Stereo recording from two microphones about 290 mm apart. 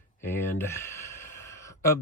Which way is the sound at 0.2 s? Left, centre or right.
Centre.